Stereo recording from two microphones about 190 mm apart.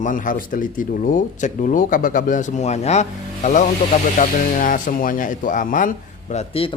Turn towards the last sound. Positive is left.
turn(degrees=30)  # may be behind; listen again after turning